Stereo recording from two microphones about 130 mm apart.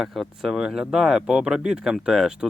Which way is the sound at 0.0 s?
Centre (ahead or behind).